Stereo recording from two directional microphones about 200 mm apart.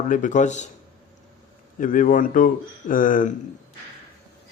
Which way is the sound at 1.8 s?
40° left (ahead or behind).